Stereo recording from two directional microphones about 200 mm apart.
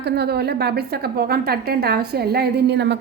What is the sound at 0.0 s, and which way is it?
A woman's voice, 55° right (ahead or behind).